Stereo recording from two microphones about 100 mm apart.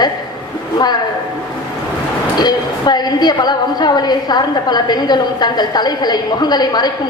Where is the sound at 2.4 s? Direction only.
45° left (ahead or behind).